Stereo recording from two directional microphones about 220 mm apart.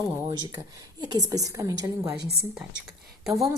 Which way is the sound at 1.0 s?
15° right (ahead or behind).